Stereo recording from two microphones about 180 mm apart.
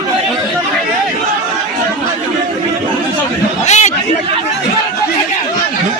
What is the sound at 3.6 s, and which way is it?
Chatter, 40° left (ahead or behind).